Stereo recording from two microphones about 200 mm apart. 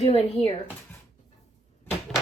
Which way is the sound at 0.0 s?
30° left (ahead or behind).